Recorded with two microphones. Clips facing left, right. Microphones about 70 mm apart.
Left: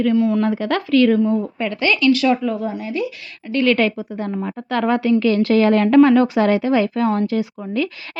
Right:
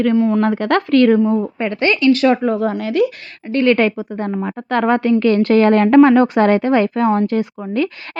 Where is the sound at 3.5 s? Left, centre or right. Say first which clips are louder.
Right 3 dB; right.